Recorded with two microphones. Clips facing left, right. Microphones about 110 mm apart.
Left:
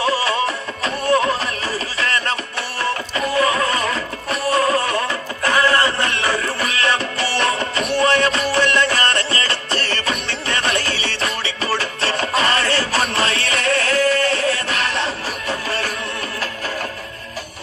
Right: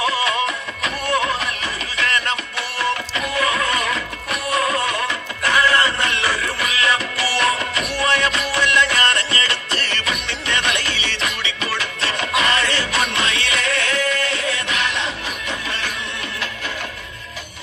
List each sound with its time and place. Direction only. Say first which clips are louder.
0.0 s music: left 2 dB; 30° left (ahead or behind)